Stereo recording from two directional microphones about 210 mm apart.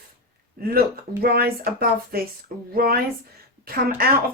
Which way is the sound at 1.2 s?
45° right (ahead or behind).